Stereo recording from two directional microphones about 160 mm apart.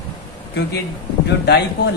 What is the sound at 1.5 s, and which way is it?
Speech, 90° left.